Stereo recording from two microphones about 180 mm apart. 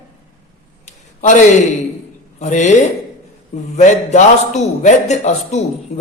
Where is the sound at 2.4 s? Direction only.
40° left (ahead or behind).